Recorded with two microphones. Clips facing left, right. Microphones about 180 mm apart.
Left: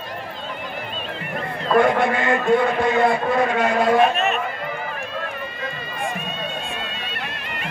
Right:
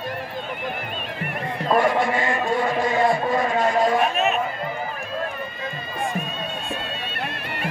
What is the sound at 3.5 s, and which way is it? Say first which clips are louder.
Speech: left 1 dB; 70° left (ahead or behind).